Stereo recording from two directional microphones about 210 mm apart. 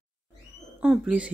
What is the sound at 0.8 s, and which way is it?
Speech, 5° right (ahead or behind).